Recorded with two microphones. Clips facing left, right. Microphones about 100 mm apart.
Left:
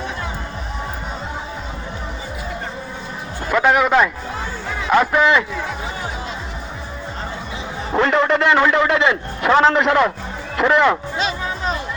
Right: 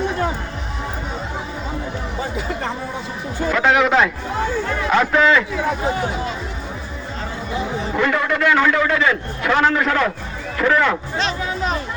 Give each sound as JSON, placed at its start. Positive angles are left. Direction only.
{"t": 2.5, "sound": "music", "side_deg": -90}
{"t": 3.5, "sound": "a man's voice", "side_deg": 5}
{"t": 7.9, "sound": "a man's voice", "side_deg": 30}